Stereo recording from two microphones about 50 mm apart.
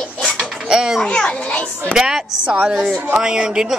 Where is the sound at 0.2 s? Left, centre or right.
Centre.